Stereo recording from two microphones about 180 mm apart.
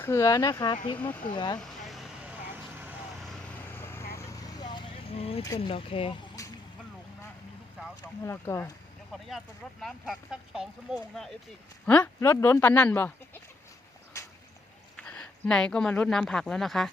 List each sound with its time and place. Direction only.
0.0 s speech: 15° left (ahead or behind)
1.5 s vehicle: centre (ahead or behind)
2.5 s vehicle: 10° right (ahead or behind)
3.7 s vehicle: 15° left (ahead or behind); by 5.4 s 35° left (ahead or behind)
5.5 s speech: 30° left (ahead or behind)
7.8 s speech: 15° left (ahead or behind)
9.8 s speech: centre (ahead or behind)
11.9 s speech: 10° left (ahead or behind)
14.9 s speech: 5° left (ahead or behind)